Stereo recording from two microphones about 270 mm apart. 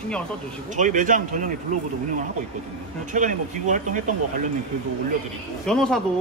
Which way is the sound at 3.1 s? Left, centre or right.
Right.